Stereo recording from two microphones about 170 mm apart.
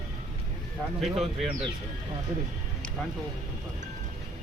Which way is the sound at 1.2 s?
Centre (ahead or behind).